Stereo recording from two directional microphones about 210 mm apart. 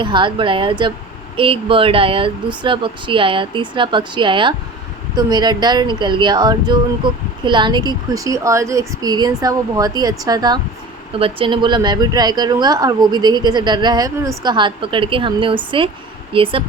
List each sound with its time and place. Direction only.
0.0 s speech: 25° right (ahead or behind)